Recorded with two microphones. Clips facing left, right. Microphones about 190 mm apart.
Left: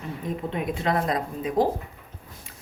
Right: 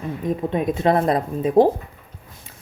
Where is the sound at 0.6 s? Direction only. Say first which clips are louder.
Right 6 dB; 25° right (ahead or behind).